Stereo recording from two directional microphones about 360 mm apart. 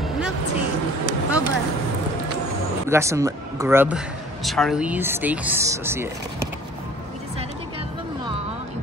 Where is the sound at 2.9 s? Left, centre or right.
Centre.